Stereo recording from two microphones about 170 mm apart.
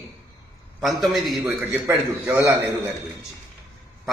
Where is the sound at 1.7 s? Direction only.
15° right (ahead or behind).